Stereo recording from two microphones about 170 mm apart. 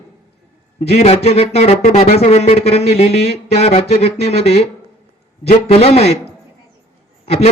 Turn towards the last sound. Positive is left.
turn(degrees=35)  # may be behind; listen again after turning